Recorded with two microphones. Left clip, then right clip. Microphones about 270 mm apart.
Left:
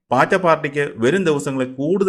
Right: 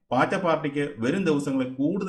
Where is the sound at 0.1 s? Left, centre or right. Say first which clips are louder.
Left 8 dB; left.